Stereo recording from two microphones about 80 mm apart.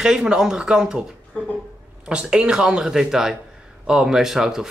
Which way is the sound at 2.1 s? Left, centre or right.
Centre.